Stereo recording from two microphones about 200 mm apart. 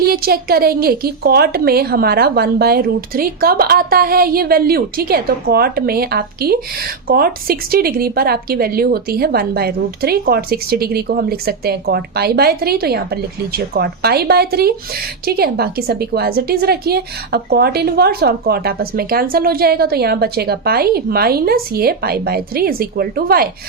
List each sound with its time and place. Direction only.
0.0 s a woman's voice: 50° right (ahead or behind)